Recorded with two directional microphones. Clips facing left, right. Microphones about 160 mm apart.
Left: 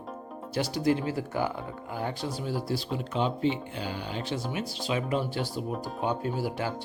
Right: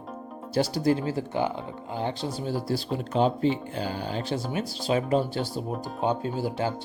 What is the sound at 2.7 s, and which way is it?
Speech, 40° right (ahead or behind).